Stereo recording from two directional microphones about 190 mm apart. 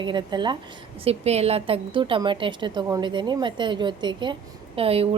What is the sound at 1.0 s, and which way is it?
Speech, 35° right (ahead or behind).